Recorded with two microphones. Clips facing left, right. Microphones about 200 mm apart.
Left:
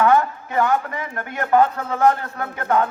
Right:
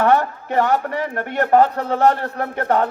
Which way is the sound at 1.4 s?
40° right (ahead or behind).